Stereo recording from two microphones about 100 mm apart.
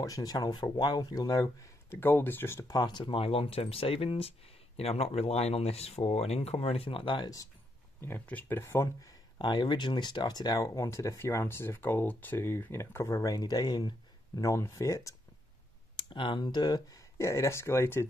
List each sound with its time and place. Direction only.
0.0 s speech: 35° left (ahead or behind)
1.9 s speech: 25° left (ahead or behind)
2.7 s speech: 45° left (ahead or behind); by 7.2 s 65° left (ahead or behind)
7.2 s speech: 40° left (ahead or behind)
8.0 s speech: 20° left (ahead or behind)
8.6 s speech: 30° left (ahead or behind)
9.4 s speech: 50° left (ahead or behind); by 15.1 s 30° left (ahead or behind)
16.0 s speech: 55° left (ahead or behind); by 18.0 s 25° left (ahead or behind)